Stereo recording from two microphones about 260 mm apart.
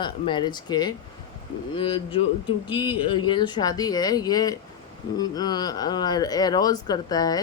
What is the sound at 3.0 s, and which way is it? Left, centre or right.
Speech, centre.